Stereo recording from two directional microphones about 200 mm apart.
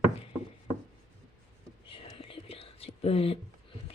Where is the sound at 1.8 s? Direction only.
25° left (ahead or behind).